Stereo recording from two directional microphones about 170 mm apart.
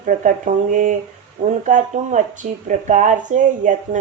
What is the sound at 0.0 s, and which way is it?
Speech, 50° right (ahead or behind).